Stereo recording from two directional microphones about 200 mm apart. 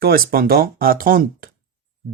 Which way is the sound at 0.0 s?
50° right (ahead or behind).